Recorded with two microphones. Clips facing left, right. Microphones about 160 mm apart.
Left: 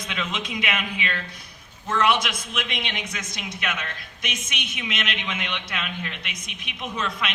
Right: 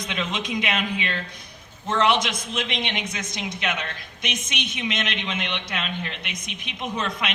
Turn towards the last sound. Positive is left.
turn(degrees=-20)  # may be behind; listen again after turning